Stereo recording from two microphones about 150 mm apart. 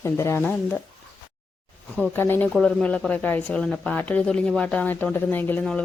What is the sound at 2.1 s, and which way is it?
Speech, 15° left (ahead or behind).